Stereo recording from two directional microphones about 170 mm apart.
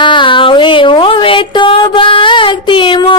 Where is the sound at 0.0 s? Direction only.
30° left (ahead or behind).